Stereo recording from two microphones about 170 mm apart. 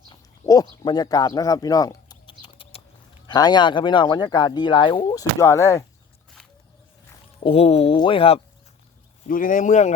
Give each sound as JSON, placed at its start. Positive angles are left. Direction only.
{"t": 0.1, "sound": "a sound", "side_deg": 20}
{"t": 3.2, "sound": "speech", "side_deg": 25}
{"t": 7.4, "sound": "speech", "side_deg": 35}
{"t": 9.2, "sound": "speech", "side_deg": 55}